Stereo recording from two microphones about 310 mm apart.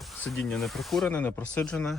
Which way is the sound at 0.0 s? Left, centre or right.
Centre.